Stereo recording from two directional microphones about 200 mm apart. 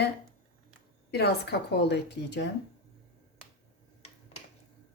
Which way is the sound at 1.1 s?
55° left (ahead or behind).